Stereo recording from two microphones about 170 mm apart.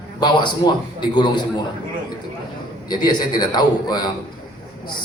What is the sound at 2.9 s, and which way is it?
A man's voice, 25° left (ahead or behind).